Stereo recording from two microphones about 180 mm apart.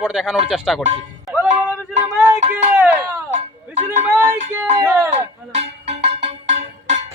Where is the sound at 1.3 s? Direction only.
5° right (ahead or behind).